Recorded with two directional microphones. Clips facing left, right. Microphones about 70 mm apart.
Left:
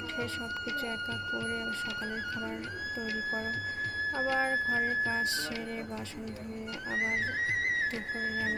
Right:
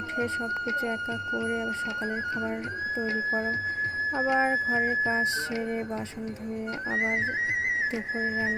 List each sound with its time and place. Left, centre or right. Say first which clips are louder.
0.7 s music: right 6 dB; right
4.2 s music: right 5 dB; right
8.2 s music: right 4 dB; right